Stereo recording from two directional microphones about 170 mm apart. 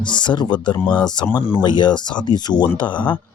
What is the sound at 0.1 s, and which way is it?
Speech, 25° left (ahead or behind).